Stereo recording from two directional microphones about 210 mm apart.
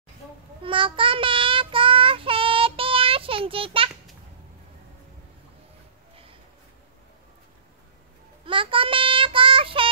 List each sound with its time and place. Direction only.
0.6 s child singing: 25° right (ahead or behind)
8.5 s child singing: 25° right (ahead or behind)